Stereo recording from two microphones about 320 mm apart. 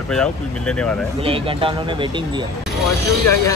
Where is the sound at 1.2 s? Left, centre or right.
Centre.